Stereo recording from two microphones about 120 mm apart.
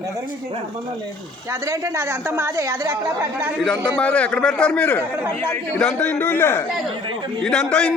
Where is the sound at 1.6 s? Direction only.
25° right (ahead or behind).